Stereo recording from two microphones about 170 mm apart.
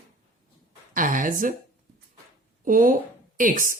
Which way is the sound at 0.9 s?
50° right (ahead or behind).